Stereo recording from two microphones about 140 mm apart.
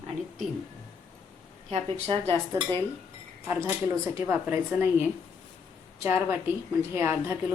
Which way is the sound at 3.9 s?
15° right (ahead or behind).